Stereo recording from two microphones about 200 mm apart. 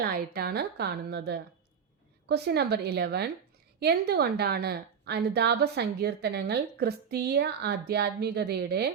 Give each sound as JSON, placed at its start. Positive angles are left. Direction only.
{"t": 0.0, "sound": "a woman's voice", "side_deg": -50}